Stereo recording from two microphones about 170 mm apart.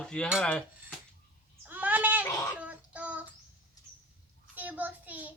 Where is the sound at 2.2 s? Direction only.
15° left (ahead or behind).